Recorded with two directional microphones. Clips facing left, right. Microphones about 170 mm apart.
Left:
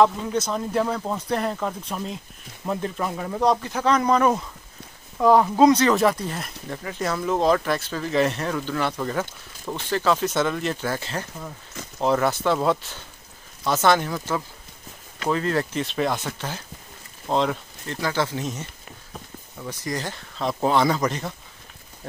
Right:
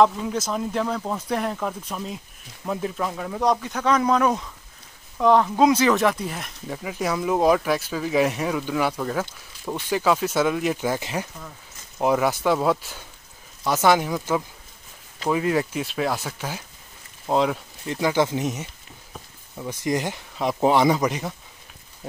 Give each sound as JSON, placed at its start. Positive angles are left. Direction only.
{"t": 0.0, "sound": "speech", "side_deg": 0}
{"t": 5.6, "sound": "speech", "side_deg": -5}
{"t": 19.8, "sound": "speech", "side_deg": -20}